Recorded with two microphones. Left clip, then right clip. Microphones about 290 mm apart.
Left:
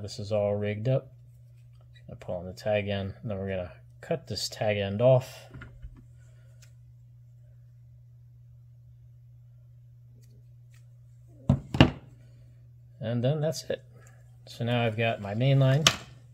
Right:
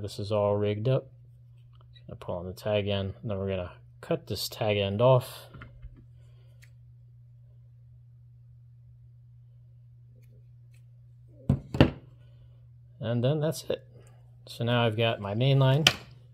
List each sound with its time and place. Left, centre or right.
0.0 s speech: centre
2.0 s speech: centre
5.5 s a sound: centre
11.4 s thunk: centre
13.0 s speech: centre